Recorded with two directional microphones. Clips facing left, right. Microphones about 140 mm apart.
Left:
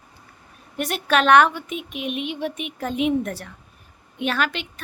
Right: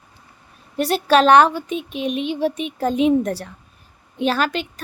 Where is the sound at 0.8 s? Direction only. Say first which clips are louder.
Right 6 dB; 30° right (ahead or behind).